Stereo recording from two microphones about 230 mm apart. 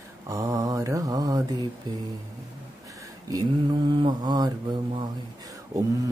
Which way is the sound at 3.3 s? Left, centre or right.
Centre.